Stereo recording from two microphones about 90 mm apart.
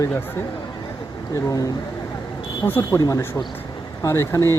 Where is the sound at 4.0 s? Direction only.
35° left (ahead or behind).